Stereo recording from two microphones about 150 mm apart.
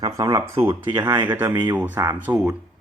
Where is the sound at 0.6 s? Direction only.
30° right (ahead or behind).